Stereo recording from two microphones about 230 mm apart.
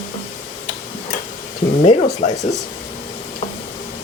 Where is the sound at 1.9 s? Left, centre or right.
Left.